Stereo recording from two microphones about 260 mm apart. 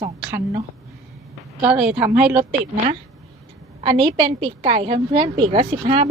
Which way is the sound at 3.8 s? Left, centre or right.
Centre.